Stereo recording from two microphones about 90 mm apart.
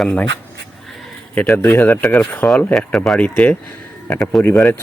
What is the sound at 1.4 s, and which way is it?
Speech, 20° left (ahead or behind).